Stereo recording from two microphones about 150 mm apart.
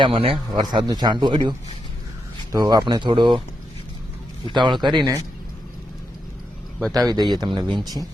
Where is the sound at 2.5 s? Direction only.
25° right (ahead or behind).